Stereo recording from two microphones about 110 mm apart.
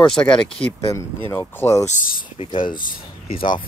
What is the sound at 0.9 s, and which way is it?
Speech, 25° left (ahead or behind).